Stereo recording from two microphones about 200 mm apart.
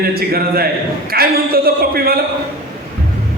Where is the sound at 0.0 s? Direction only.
50° right (ahead or behind).